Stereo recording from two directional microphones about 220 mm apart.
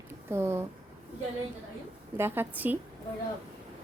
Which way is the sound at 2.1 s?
10° right (ahead or behind).